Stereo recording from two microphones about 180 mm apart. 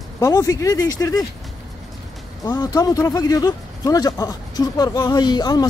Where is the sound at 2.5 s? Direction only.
20° left (ahead or behind).